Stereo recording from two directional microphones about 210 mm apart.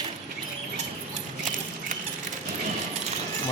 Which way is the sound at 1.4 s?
40° right (ahead or behind).